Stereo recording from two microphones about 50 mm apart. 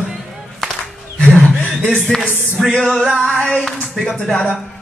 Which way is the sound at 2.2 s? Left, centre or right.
Centre.